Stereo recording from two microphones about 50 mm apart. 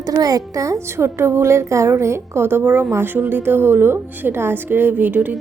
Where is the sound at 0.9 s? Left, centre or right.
Right.